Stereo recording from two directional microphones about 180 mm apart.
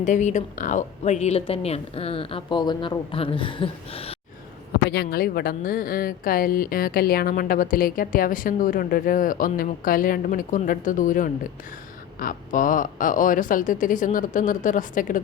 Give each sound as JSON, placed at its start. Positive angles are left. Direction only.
{"t": 0.0, "sound": "a woman's voice", "side_deg": 45}
{"t": 4.9, "sound": "a woman's voice", "side_deg": 60}